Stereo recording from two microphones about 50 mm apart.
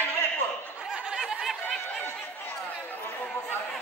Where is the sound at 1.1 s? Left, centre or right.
Centre.